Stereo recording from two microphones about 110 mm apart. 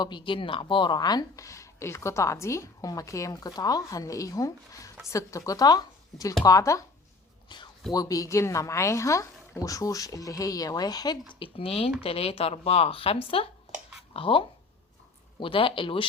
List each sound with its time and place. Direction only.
0.0 s speech: 45° left (ahead or behind); by 6.8 s 30° left (ahead or behind)
7.5 s speech: 45° left (ahead or behind)
7.9 s speech: 30° left (ahead or behind)
11.3 s speech: 55° left (ahead or behind)